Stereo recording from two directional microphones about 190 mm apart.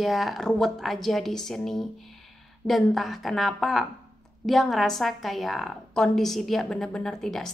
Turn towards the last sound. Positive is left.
turn(degrees=0)  # may be behind; listen again after turning